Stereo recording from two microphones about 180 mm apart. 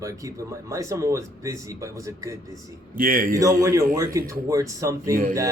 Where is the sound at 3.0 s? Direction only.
50° right (ahead or behind).